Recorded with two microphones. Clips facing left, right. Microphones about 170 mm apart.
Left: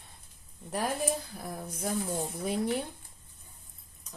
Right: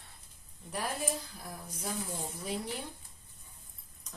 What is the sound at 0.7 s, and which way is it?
Speech, 45° left (ahead or behind).